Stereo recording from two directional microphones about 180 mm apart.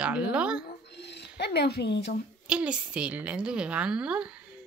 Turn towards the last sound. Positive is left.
turn(degrees=-5)  # may be behind; listen again after turning